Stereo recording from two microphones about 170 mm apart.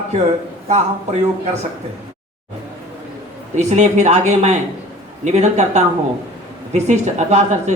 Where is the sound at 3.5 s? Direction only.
40° right (ahead or behind).